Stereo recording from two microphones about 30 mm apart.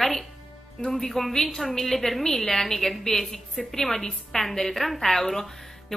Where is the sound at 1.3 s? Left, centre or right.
Left.